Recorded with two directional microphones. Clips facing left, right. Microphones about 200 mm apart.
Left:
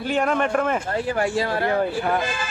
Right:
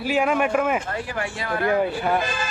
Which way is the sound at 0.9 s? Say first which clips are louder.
Left 7 dB; 30° left (ahead or behind).